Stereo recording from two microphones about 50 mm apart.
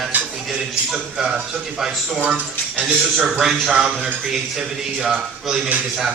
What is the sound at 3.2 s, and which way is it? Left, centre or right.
A man's voice, centre.